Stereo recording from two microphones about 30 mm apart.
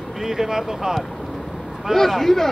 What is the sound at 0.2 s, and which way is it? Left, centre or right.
Speech, centre.